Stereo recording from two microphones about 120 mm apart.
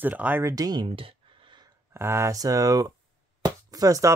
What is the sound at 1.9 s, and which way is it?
Speech, 20° right (ahead or behind).